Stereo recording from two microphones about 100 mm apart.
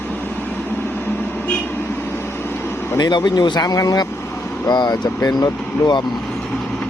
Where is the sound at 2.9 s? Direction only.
45° left (ahead or behind).